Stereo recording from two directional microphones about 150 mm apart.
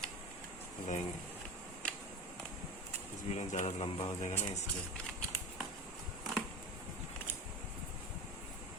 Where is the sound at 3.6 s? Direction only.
35° left (ahead or behind).